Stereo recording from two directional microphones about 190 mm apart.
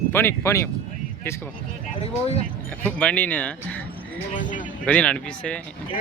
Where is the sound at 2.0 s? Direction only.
35° left (ahead or behind).